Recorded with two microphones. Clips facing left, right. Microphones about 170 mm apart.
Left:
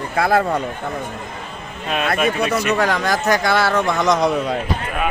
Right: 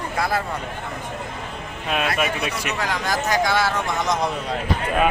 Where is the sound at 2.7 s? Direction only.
65° left (ahead or behind).